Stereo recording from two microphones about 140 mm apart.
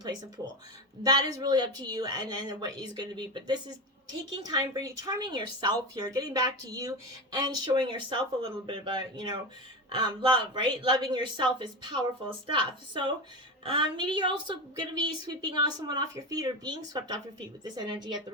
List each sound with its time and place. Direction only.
1.0 s a woman's voice: 30° right (ahead or behind)